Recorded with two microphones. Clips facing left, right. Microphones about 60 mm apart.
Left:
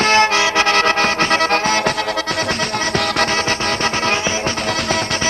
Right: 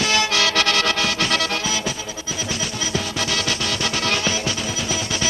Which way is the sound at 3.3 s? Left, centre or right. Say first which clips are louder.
Left 5 dB; left.